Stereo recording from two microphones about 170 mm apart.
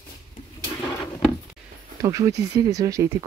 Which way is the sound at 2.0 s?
20° right (ahead or behind).